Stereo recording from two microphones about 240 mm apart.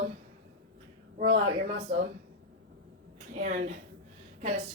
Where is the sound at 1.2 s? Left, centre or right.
Right.